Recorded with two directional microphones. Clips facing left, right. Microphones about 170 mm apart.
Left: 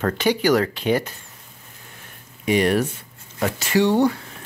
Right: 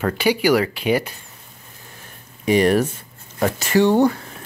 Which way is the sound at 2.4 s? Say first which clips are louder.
Right 3 dB; 40° right (ahead or behind).